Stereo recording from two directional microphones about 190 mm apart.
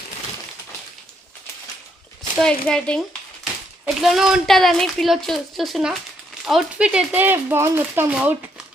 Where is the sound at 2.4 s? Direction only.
5° left (ahead or behind).